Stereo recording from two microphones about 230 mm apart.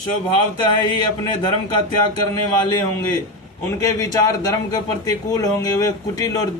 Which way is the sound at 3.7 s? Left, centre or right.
Centre.